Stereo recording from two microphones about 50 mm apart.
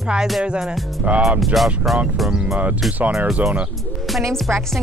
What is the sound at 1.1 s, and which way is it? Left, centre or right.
Speech, right.